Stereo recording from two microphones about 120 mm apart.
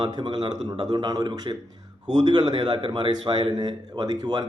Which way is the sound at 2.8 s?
45° right (ahead or behind).